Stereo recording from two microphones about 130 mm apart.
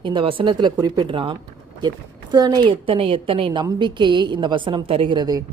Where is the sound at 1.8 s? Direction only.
30° right (ahead or behind).